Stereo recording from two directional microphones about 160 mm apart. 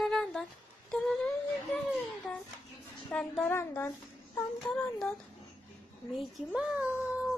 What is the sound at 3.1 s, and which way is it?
Speech, 10° left (ahead or behind).